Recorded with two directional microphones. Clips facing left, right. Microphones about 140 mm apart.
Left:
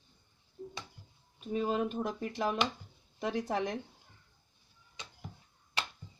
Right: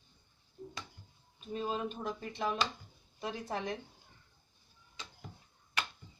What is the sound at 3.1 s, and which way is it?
Speech, 85° left.